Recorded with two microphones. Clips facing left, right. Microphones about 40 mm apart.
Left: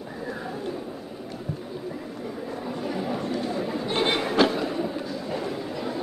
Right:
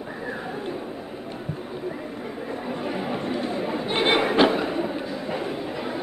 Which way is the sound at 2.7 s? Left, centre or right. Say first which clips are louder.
Right 1 dB; right.